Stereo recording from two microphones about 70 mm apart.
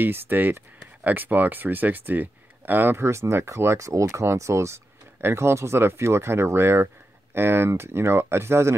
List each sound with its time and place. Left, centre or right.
0.0 s speech: right